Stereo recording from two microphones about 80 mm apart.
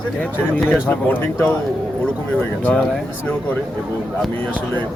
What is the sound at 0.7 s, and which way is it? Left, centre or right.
Speech, centre.